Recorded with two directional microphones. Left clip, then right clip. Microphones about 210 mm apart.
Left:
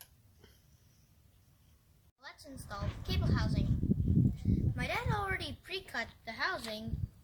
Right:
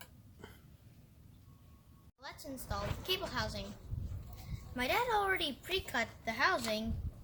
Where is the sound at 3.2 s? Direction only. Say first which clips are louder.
Right 1 dB; 5° right (ahead or behind).